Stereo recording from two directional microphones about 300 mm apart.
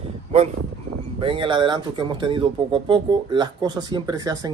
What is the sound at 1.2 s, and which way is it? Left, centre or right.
Speech, centre.